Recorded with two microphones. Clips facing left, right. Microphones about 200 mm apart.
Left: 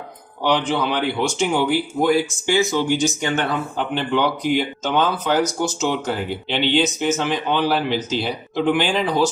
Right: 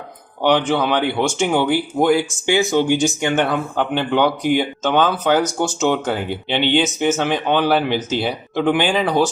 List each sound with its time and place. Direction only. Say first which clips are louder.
0.4 s speech: right 3 dB; 55° right (ahead or behind)